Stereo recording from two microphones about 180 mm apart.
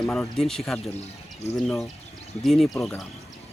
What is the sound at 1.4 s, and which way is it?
Speech, 35° left (ahead or behind).